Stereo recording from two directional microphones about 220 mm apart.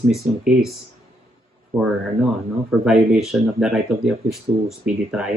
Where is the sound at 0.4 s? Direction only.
Centre (ahead or behind).